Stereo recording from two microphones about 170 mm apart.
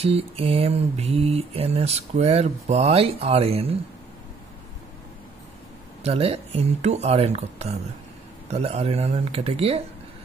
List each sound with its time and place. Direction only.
0.0 s speech: 35° right (ahead or behind)
6.0 s speech: 35° right (ahead or behind)